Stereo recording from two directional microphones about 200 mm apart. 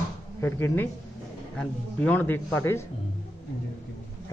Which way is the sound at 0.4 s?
10° left (ahead or behind).